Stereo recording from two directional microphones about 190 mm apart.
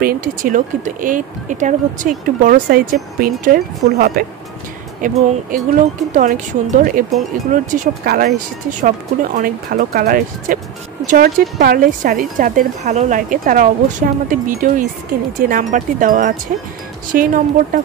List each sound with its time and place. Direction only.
0.0 s speech: 50° right (ahead or behind)
9.4 s speech: 50° right (ahead or behind)